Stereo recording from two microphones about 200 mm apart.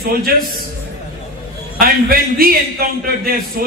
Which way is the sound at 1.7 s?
50° right (ahead or behind).